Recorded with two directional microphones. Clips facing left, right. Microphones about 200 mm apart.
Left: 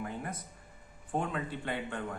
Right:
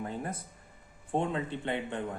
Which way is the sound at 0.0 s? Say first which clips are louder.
Right 2 dB; 30° right (ahead or behind).